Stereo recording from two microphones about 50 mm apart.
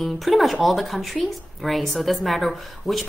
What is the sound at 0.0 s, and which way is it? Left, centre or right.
Speech, centre.